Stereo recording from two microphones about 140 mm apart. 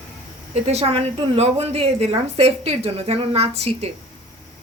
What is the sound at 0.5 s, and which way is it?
Speech, 50° right (ahead or behind).